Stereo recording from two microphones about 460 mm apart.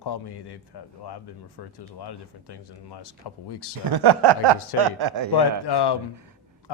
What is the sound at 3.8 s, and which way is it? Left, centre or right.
Speech, right.